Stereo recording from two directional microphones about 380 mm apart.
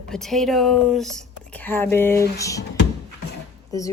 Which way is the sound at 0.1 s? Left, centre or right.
Centre.